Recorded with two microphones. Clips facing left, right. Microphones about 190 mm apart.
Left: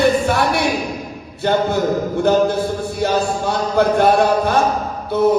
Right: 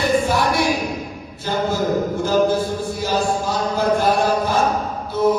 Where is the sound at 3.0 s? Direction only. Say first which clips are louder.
Left 3 dB; 65° left (ahead or behind).